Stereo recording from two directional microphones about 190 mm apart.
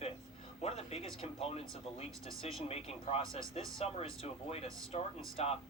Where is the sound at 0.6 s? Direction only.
35° left (ahead or behind).